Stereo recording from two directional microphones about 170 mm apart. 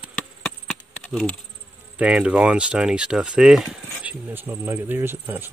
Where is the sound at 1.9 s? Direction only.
5° right (ahead or behind).